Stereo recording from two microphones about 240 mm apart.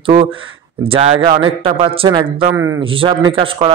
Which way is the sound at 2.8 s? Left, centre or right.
Right.